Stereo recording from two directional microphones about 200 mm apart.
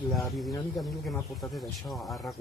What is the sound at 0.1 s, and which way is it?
Speech, centre (ahead or behind).